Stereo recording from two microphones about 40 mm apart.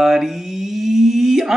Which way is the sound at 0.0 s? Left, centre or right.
Centre.